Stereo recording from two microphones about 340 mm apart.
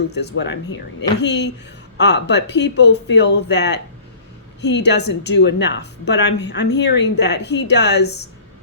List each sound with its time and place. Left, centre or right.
0.2 s a woman's voice: left